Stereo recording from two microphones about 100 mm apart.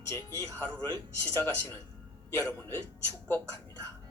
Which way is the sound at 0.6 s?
20° left (ahead or behind).